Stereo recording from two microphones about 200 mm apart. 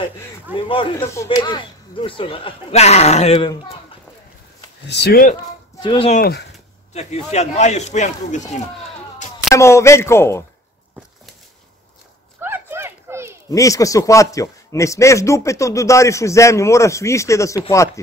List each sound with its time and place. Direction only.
0.6 s speech: 25° left (ahead or behind)
1.0 s speech: 15° left (ahead or behind); by 3.3 s 35° left (ahead or behind)
3.3 s speech: 20° left (ahead or behind)
4.8 s speech: 55° left (ahead or behind)
5.8 s speech: 25° left (ahead or behind)
6.1 s speech: 50° left (ahead or behind)
6.9 s speech: 35° left (ahead or behind)
9.5 s a man's voice: 15° left (ahead or behind)
12.4 s a sound: 10° right (ahead or behind)
13.5 s a man's voice: 15° left (ahead or behind)